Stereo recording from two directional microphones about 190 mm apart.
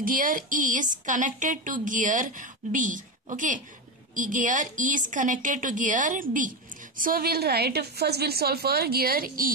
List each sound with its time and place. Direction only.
0.0 s a woman's voice: 45° right (ahead or behind)